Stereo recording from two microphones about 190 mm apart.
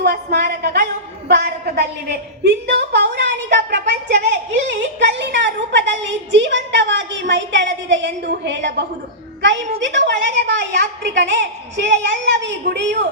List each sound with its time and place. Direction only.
0.0 s a woman's voice: 60° right (ahead or behind)